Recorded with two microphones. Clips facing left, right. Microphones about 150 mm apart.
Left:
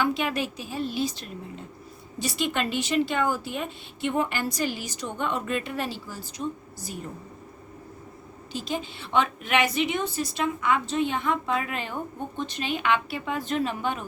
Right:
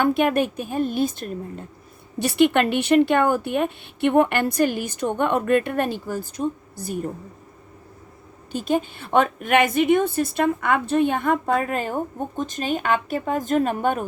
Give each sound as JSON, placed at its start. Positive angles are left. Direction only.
{"t": 0.0, "sound": "a woman's voice", "side_deg": -55}
{"t": 2.1, "sound": "a woman's voice", "side_deg": -60}
{"t": 8.5, "sound": "a woman's voice", "side_deg": -55}